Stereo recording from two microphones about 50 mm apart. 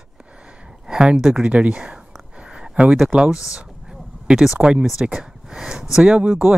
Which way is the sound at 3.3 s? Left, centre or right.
Left.